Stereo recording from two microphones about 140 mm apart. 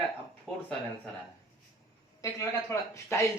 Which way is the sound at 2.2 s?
20° left (ahead or behind).